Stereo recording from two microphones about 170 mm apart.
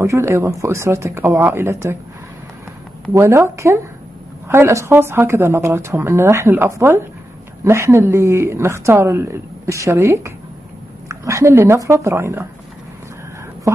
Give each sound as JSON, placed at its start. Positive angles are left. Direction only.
{"t": 0.0, "sound": "speech", "side_deg": -15}
{"t": 3.1, "sound": "speech", "side_deg": -15}